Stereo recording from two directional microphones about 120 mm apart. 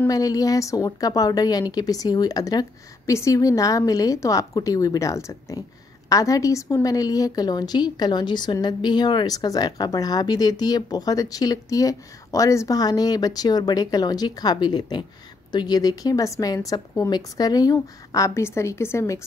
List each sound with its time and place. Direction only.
0.1 s a woman's voice: 30° left (ahead or behind)